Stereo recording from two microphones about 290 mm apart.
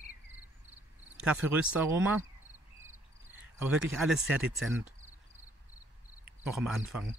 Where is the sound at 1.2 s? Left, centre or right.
Centre.